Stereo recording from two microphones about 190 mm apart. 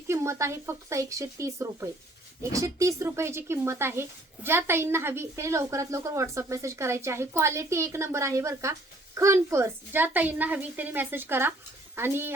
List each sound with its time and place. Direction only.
0.1 s a woman's voice: 15° right (ahead or behind)